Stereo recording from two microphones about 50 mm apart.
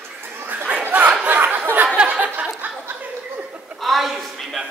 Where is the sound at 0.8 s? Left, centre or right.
Right.